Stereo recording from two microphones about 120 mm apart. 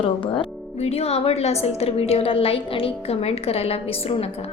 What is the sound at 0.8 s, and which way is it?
A woman's voice, 60° left (ahead or behind).